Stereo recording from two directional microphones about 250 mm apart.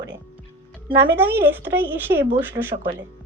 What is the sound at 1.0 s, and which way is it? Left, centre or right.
A child's voice, centre.